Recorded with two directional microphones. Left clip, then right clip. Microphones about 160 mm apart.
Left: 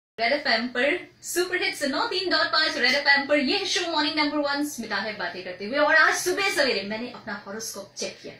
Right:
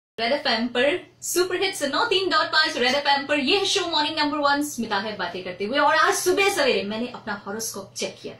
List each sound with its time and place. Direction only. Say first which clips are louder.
0.2 s a woman's voice: even; centre (ahead or behind)